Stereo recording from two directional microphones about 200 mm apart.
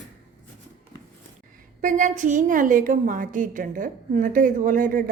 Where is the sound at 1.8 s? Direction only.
40° right (ahead or behind).